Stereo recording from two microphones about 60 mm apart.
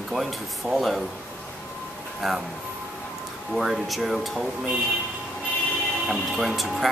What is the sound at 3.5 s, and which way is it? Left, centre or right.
Speech, centre.